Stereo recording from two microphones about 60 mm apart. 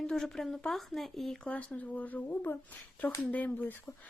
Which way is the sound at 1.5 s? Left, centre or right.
Left.